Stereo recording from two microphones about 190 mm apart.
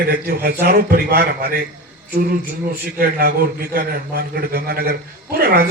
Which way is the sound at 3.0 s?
55° right (ahead or behind).